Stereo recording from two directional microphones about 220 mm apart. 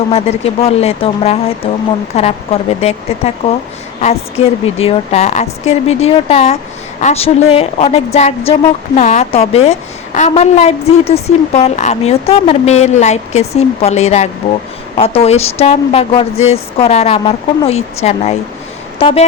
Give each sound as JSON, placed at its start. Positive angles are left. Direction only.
{"t": 0.1, "sound": "a woman's voice", "side_deg": 30}
{"t": 4.6, "sound": "a woman's voice", "side_deg": 25}